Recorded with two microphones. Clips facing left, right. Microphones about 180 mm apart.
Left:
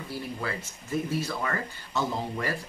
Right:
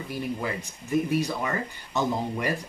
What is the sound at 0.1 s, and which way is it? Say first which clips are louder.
Speech: right 3 dB; 15° right (ahead or behind).